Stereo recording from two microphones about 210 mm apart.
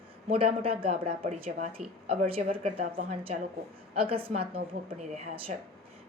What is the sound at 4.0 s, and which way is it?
Speech, 25° right (ahead or behind).